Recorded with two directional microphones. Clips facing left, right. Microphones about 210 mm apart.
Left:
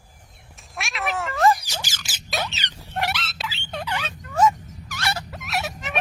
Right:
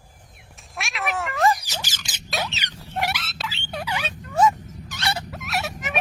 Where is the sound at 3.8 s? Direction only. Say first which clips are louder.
Right 1 dB; 15° right (ahead or behind).